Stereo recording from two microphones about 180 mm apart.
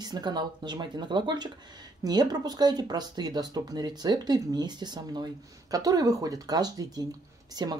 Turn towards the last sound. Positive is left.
turn(degrees=-20)  # may be behind; listen again after turning